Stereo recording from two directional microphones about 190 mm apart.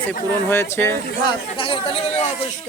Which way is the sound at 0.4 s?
15° left (ahead or behind).